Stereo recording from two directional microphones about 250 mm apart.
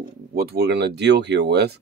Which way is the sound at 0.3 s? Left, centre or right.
Right.